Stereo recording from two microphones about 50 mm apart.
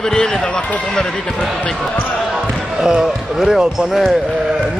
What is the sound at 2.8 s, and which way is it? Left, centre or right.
Speech, centre.